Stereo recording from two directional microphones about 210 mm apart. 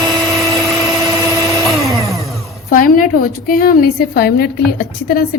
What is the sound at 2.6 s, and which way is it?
A woman's voice, 40° left (ahead or behind).